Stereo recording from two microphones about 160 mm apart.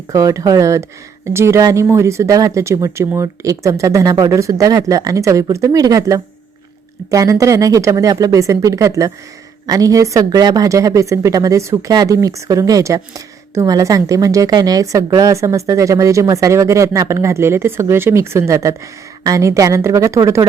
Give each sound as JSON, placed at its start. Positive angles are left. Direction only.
{"t": 0.1, "sound": "speech", "side_deg": -20}